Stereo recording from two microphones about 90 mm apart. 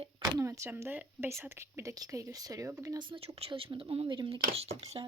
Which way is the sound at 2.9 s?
70° right (ahead or behind).